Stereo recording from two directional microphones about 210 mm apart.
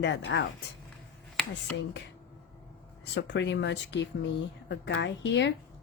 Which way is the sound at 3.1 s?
55° left (ahead or behind).